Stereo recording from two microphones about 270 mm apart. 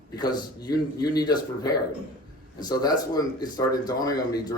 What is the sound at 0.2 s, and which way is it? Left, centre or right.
Speech, centre.